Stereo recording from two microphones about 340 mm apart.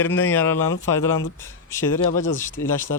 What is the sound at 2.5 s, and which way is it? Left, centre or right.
Speech, left.